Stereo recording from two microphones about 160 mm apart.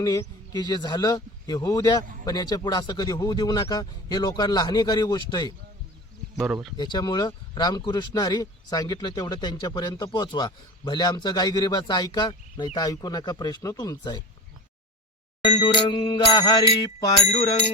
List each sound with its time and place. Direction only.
0.0 s speech: 20° left (ahead or behind)
6.3 s speech: centre (ahead or behind)
6.7 s speech: 25° left (ahead or behind)
15.4 s speech: 30° left (ahead or behind)